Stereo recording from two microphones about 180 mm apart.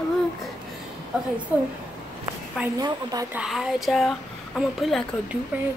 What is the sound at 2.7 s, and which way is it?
Speech, 20° right (ahead or behind).